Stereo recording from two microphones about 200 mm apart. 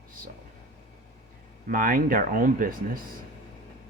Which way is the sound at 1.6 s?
45° right (ahead or behind).